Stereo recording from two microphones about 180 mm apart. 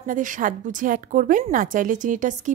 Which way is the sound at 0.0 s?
45° right (ahead or behind).